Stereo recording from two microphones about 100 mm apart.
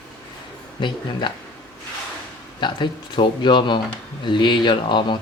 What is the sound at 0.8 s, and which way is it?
Speech, 50° left (ahead or behind).